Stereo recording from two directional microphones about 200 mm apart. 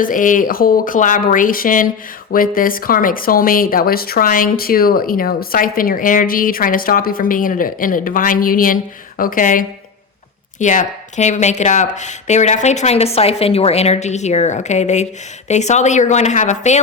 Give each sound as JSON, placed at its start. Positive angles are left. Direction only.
{"t": 0.0, "sound": "a woman's voice", "side_deg": 40}